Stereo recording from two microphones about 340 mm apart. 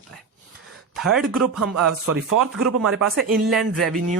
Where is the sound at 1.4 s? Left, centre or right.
Right.